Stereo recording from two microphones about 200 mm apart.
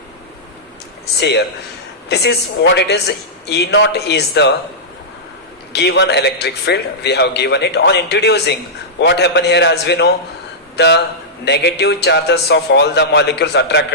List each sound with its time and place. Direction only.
1.2 s a man's voice: 55° left (ahead or behind)
5.7 s a man's voice: 55° left (ahead or behind)